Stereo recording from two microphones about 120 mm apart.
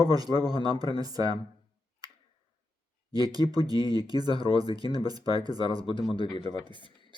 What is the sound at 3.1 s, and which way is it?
Speech, 30° right (ahead or behind).